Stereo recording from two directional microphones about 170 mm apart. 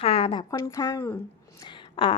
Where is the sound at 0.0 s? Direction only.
35° left (ahead or behind).